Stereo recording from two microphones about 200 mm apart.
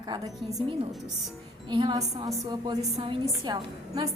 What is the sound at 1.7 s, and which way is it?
A woman's voice, 25° right (ahead or behind).